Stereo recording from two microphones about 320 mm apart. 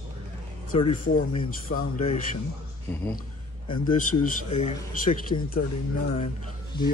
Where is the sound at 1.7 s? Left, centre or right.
Left.